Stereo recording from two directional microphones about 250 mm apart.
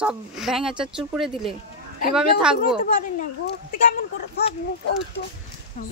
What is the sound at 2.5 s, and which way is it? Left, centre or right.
Speech, left.